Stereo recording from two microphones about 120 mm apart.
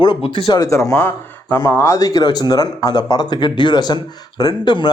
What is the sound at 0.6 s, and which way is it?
Speech, 25° left (ahead or behind).